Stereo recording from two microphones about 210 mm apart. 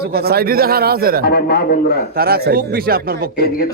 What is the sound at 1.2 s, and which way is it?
Speech, 50° left (ahead or behind).